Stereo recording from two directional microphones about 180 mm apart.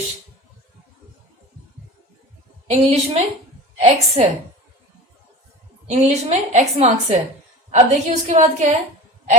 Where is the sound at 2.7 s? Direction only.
35° right (ahead or behind).